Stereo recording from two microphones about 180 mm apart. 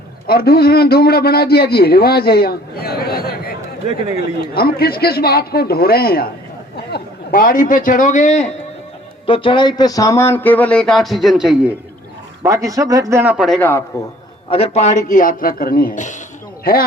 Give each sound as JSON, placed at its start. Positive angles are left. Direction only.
{"t": 0.3, "sound": "a man's voice", "side_deg": 60}
{"t": 4.5, "sound": "a man's voice", "side_deg": 55}
{"t": 12.4, "sound": "speech", "side_deg": -15}
{"t": 13.3, "sound": "a man's voice", "side_deg": 0}
{"t": 13.6, "sound": "speech", "side_deg": 10}
{"t": 14.5, "sound": "speech", "side_deg": 35}